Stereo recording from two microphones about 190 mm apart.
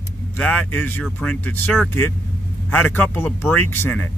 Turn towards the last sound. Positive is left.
turn(degrees=10)  # may be behind; listen again after turning